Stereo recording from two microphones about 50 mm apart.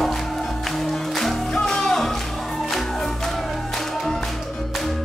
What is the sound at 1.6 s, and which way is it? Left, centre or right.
Music, centre.